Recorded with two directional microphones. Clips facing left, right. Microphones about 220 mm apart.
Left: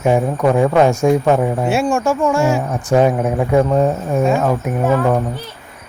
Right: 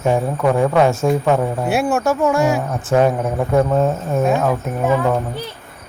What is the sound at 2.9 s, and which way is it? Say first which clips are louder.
Speech: left 2 dB; 15° left (ahead or behind).